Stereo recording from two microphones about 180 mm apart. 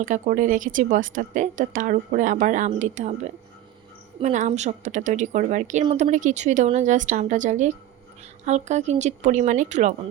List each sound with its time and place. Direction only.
0.0 s a woman's voice: 45° right (ahead or behind)